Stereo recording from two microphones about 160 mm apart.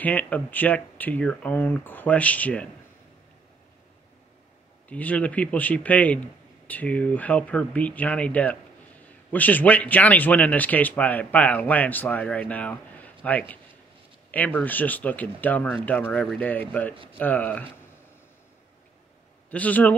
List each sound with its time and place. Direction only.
0.0 s speech: 10° left (ahead or behind)
4.8 s speech: 10° left (ahead or behind)
16.9 s speech: 35° right (ahead or behind)
17.2 s speech: 10° left (ahead or behind)
19.5 s speech: 10° left (ahead or behind)